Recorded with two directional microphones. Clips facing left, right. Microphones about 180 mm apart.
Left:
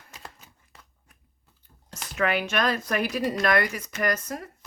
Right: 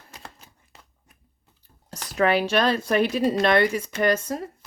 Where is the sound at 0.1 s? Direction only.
35° right (ahead or behind).